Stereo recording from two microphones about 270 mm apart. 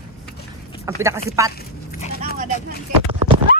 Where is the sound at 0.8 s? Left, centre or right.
Centre.